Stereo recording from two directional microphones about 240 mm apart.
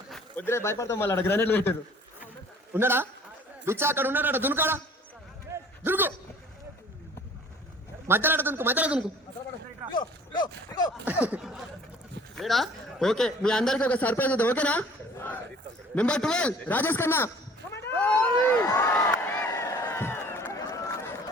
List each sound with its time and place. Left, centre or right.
0.1 s speech: centre
2.7 s a man's voice: centre
5.8 s a sound: centre
8.0 s a man's voice: centre
9.9 s speech: centre
11.0 s a man's voice: centre
17.7 s a sound: centre